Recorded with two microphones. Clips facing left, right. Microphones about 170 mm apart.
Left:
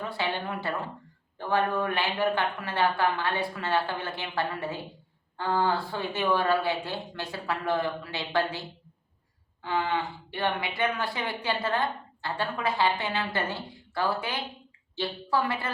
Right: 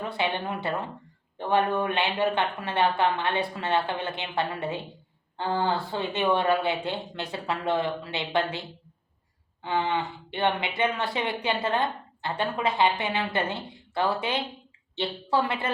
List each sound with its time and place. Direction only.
0.0 s a woman's voice: 20° right (ahead or behind)